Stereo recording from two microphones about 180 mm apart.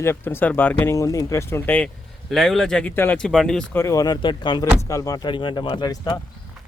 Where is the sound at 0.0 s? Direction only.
10° left (ahead or behind).